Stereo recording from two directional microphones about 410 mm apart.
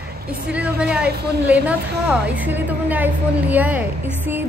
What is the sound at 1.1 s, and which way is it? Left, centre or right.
Speech, right.